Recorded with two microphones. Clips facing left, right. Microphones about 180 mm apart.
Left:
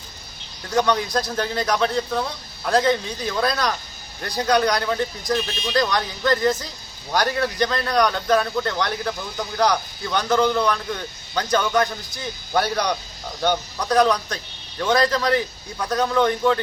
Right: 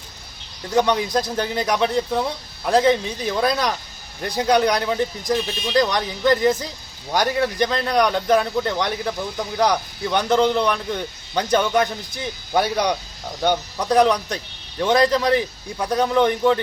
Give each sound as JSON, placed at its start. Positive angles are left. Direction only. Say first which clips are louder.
{"t": 0.7, "sound": "a man's voice", "louder": "right 2 dB", "side_deg": -20}